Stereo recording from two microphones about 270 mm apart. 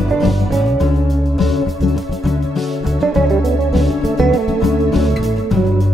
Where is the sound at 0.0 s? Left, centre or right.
Centre.